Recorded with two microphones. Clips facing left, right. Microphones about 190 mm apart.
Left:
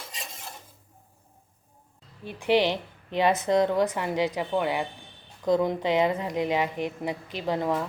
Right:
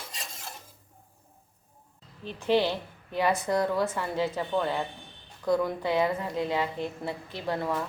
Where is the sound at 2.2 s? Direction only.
15° left (ahead or behind).